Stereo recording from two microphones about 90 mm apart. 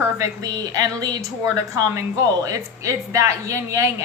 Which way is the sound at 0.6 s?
45° right (ahead or behind).